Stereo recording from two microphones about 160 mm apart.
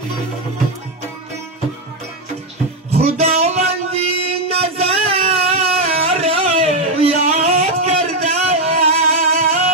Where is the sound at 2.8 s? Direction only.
40° right (ahead or behind).